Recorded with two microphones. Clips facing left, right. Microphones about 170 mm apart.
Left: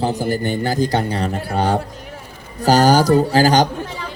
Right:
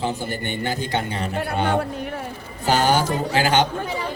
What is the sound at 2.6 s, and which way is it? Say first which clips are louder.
A man's voice: left 6 dB; 40° left (ahead or behind).